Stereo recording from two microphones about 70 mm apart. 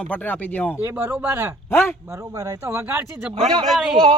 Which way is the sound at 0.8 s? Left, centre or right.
Right.